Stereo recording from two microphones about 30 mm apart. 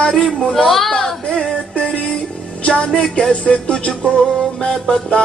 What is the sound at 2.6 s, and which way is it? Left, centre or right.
Music, left.